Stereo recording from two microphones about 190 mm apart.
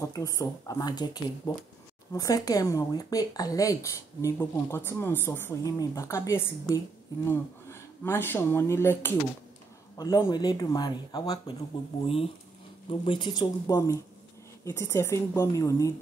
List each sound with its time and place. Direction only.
0.0 s speech: 15° left (ahead or behind)
13.0 s speech: 25° left (ahead or behind)